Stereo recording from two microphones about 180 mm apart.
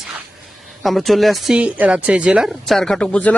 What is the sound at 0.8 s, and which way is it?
Speech, centre (ahead or behind).